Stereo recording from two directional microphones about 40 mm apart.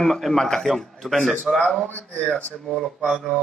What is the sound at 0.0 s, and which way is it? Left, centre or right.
A man's voice, centre.